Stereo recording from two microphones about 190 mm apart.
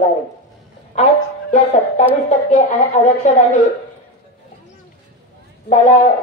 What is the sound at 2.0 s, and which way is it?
Speech, 35° left (ahead or behind).